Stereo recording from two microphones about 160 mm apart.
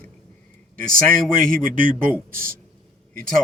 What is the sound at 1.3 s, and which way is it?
Speech, 55° right (ahead or behind).